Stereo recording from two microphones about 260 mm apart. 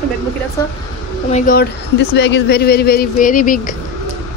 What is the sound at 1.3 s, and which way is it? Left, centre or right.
Speech, left.